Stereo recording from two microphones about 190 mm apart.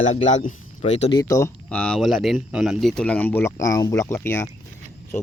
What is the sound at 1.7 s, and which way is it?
Speech, 5° left (ahead or behind).